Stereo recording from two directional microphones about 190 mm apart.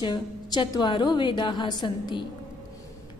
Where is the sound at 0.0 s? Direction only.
25° left (ahead or behind).